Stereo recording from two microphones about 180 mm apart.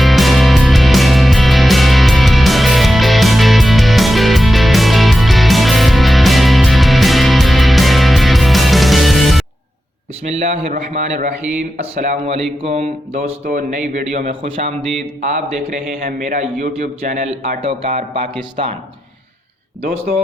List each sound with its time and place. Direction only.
0.0 s music: centre (ahead or behind)
10.2 s a man's voice: 35° right (ahead or behind)
13.4 s a man's voice: 50° right (ahead or behind)
14.4 s a man's voice: 30° right (ahead or behind)